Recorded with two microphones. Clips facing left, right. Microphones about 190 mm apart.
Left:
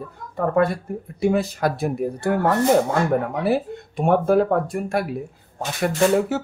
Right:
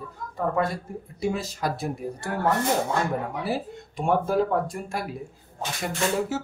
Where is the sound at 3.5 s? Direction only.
60° left (ahead or behind).